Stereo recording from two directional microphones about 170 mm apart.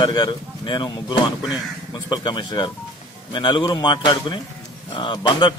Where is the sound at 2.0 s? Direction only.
25° left (ahead or behind).